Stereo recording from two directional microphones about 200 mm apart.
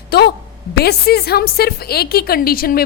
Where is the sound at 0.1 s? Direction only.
55° left (ahead or behind).